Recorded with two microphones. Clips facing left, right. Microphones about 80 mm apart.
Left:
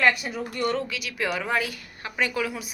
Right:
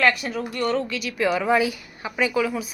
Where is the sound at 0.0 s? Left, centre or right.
Centre.